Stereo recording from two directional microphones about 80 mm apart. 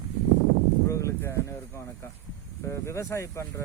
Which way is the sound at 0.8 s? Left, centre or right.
Left.